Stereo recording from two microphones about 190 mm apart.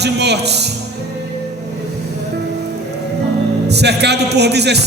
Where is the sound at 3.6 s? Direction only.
60° right (ahead or behind).